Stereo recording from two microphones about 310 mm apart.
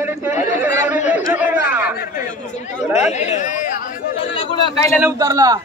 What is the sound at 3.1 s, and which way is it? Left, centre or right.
Chatter, left.